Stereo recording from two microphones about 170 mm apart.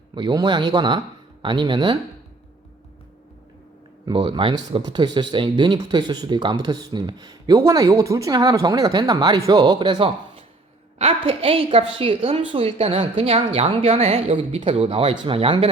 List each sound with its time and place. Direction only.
0.1 s speech: 25° right (ahead or behind)
4.0 s a woman's voice: 30° right (ahead or behind)